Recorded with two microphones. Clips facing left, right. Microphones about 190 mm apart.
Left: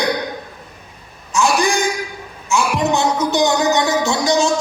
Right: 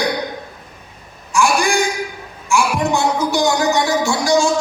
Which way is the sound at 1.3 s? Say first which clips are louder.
Even; 20° left (ahead or behind).